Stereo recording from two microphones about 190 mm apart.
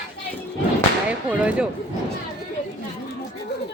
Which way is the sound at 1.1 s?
5° right (ahead or behind).